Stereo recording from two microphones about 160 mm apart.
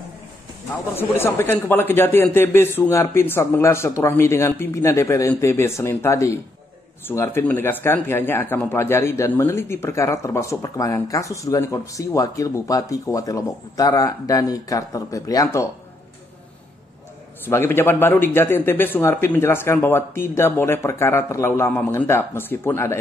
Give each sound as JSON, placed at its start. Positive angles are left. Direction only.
{"t": 0.9, "sound": "speech", "side_deg": 15}
{"t": 17.5, "sound": "speech", "side_deg": 15}